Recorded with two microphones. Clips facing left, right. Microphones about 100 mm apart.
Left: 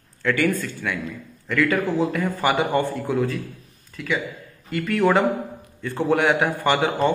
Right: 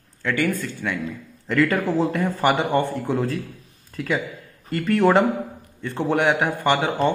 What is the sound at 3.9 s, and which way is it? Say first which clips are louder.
A man's voice: right 1 dB; 45° right (ahead or behind).